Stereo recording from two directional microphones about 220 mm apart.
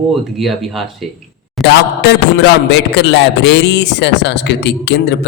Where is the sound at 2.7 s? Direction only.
55° left (ahead or behind).